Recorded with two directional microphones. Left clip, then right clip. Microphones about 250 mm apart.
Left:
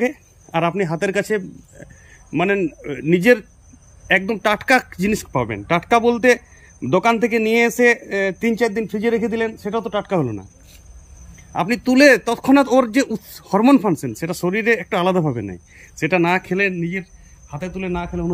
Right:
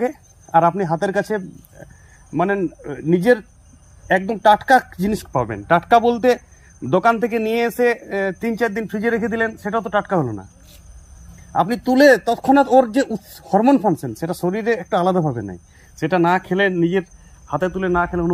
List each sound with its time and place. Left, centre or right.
0.0 s speech: centre
2.3 s a man's voice: centre
3.2 s speech: centre
11.5 s speech: centre
17.5 s a man's voice: centre